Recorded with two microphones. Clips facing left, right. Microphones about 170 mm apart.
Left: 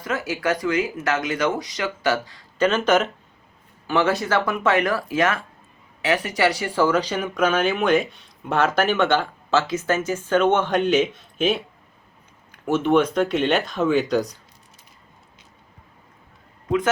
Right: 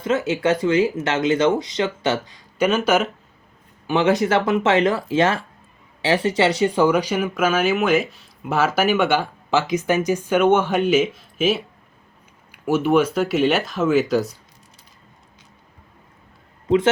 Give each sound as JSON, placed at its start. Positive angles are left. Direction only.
{"t": 0.0, "sound": "speech", "side_deg": -25}
{"t": 16.6, "sound": "a man's voice", "side_deg": -25}